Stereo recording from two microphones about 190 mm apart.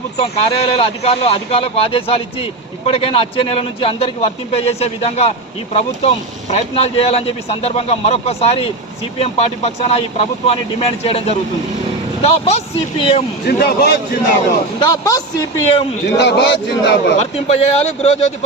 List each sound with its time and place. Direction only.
0.2 s speech: 30° left (ahead or behind)
13.5 s a man's voice: 55° left (ahead or behind)
14.8 s speech: 20° left (ahead or behind)
16.0 s a man's voice: 65° left (ahead or behind)
17.2 s speech: 35° left (ahead or behind)